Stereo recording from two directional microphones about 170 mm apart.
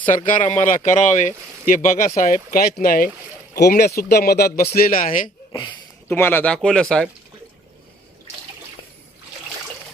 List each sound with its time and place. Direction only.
0.3 s speech: 45° left (ahead or behind)
3.5 s speech: 70° left (ahead or behind)
5.5 s speech: 25° left (ahead or behind)
6.1 s speech: 10° left (ahead or behind)